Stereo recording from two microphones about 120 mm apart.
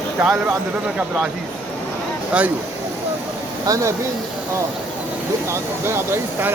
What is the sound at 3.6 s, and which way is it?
Speech, 30° right (ahead or behind).